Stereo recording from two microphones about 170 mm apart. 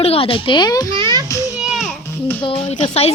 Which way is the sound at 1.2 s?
20° left (ahead or behind).